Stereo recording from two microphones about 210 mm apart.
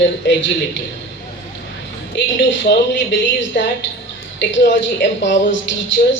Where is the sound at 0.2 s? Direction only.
60° left (ahead or behind).